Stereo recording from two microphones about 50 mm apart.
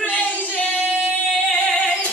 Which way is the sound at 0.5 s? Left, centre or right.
Left.